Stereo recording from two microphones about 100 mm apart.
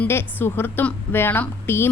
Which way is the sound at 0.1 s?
25° left (ahead or behind).